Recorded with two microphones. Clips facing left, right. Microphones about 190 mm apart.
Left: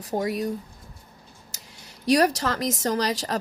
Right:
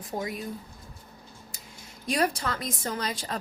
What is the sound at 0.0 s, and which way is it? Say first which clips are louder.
Speech: left 7 dB; 75° left (ahead or behind).